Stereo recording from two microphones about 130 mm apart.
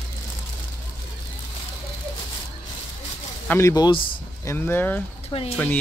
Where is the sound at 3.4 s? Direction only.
20° left (ahead or behind).